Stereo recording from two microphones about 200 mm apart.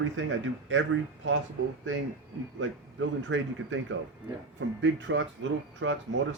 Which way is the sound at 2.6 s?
70° right (ahead or behind).